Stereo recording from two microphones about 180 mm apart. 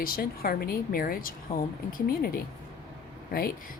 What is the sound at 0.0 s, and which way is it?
A woman's voice, 55° left (ahead or behind).